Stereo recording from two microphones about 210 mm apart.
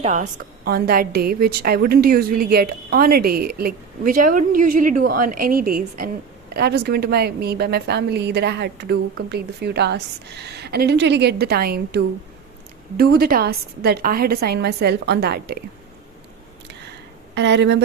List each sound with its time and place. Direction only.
0.0 s a woman's voice: 35° right (ahead or behind)
17.3 s speech: 55° right (ahead or behind)